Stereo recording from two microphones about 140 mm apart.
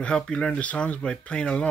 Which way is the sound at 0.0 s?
10° left (ahead or behind).